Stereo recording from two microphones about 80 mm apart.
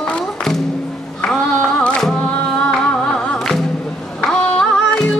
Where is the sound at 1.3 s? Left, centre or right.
Centre.